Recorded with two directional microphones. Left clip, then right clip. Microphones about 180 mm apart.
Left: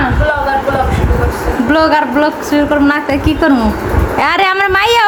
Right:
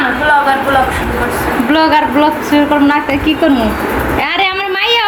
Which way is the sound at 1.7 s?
15° left (ahead or behind).